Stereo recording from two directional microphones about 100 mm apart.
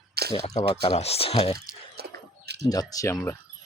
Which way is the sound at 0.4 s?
75° left (ahead or behind).